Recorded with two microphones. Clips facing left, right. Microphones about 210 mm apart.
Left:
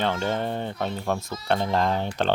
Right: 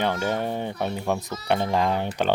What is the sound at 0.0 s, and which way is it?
Speech, 15° right (ahead or behind).